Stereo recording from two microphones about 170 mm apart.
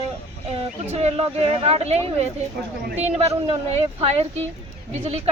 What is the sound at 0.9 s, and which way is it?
A woman's voice, 40° right (ahead or behind).